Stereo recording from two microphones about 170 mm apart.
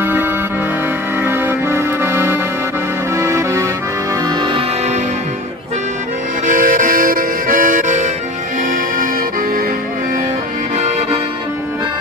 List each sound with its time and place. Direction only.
0.0 s music: 10° right (ahead or behind)
4.4 s music: 30° right (ahead or behind)
6.4 s music: 50° right (ahead or behind)